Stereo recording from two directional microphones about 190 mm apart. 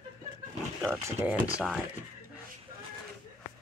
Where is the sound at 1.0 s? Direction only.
10° right (ahead or behind).